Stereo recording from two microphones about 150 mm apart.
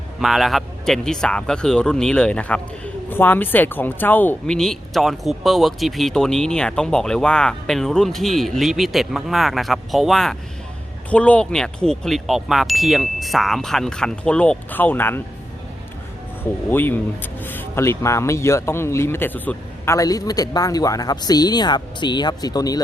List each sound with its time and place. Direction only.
0.2 s speech: centre (ahead or behind)
16.4 s speech: 15° left (ahead or behind)